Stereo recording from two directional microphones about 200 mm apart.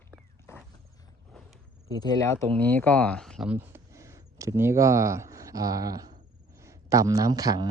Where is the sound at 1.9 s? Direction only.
20° left (ahead or behind).